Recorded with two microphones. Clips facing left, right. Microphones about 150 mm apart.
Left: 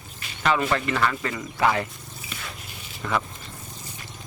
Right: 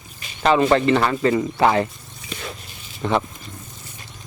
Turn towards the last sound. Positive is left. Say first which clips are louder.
# right 6 dB
turn(degrees=-30)  # may be behind; listen again after turning